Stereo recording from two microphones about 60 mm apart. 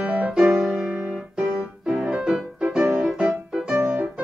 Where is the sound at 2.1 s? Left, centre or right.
Centre.